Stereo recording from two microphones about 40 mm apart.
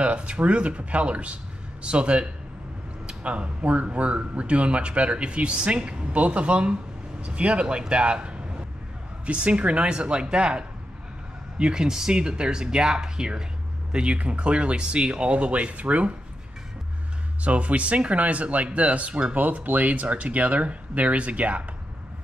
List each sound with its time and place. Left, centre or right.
0.0 s speech: right
17.4 s speech: right
19.3 s speech: right